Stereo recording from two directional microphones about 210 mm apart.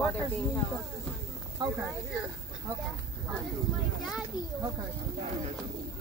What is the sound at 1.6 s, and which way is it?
Speech, 15° right (ahead or behind).